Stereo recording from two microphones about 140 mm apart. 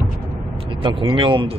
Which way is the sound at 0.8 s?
40° right (ahead or behind).